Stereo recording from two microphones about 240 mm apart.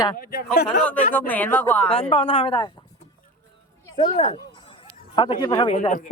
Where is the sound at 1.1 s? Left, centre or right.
Centre.